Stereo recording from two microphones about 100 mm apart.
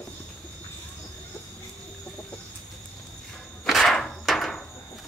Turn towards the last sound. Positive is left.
turn(degrees=0)  # may be behind; listen again after turning